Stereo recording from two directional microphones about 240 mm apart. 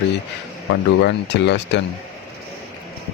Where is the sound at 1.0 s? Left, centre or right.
Left.